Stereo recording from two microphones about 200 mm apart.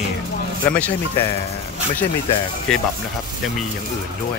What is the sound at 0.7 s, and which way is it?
Speech, 5° left (ahead or behind).